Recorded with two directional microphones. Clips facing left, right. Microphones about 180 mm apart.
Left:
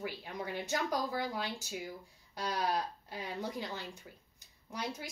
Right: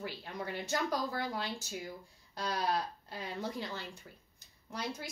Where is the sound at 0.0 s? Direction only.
15° left (ahead or behind).